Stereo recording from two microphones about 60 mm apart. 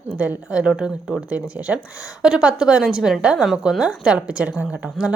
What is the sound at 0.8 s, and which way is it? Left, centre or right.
Speech, centre.